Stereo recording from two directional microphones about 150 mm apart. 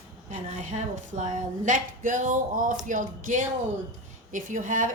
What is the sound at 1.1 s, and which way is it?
A woman's voice, 55° right (ahead or behind).